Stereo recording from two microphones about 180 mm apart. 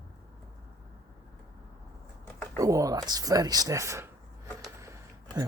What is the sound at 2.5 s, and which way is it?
Speech, 20° right (ahead or behind).